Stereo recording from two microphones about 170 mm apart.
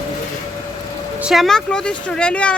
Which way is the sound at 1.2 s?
Centre (ahead or behind).